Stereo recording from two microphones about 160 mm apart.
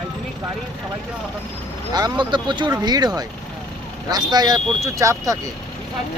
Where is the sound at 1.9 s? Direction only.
25° right (ahead or behind).